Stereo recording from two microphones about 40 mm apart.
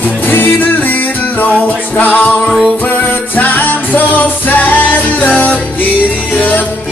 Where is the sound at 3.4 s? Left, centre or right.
Left.